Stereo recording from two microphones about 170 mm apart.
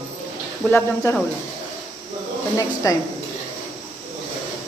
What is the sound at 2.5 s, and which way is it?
Speech, 20° left (ahead or behind).